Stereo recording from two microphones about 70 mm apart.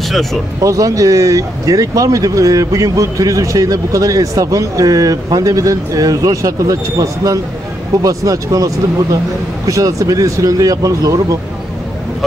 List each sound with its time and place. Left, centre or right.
0.1 s speech: centre
0.6 s speech: right